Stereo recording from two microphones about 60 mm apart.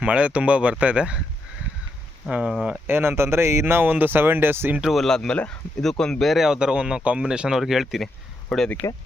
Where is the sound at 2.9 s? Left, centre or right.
Right.